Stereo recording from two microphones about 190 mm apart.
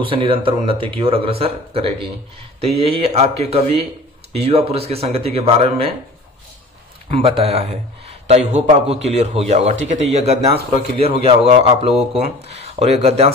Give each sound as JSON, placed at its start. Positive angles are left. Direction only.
{"t": 0.0, "sound": "speech", "side_deg": -25}
{"t": 7.1, "sound": "speech", "side_deg": -30}